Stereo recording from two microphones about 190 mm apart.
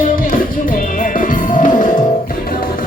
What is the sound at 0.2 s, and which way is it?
Music, 45° left (ahead or behind).